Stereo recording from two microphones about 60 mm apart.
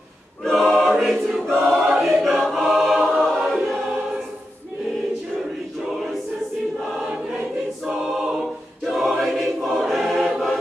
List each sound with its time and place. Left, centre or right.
0.4 s choir: centre
8.0 s choir: centre
8.8 s choir: centre